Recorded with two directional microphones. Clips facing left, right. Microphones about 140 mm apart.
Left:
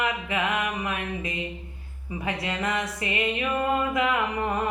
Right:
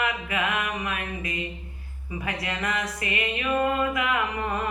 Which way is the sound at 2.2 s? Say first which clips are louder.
Left 2 dB; 25° left (ahead or behind).